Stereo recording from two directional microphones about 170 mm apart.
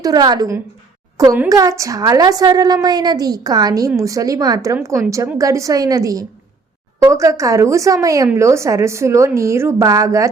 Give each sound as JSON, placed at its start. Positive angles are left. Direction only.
{"t": 0.0, "sound": "a woman's voice", "side_deg": -25}